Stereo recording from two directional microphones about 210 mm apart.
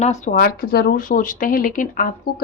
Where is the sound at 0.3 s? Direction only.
45° left (ahead or behind).